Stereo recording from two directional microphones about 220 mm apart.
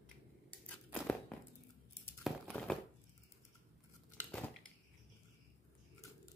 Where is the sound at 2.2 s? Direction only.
Centre (ahead or behind).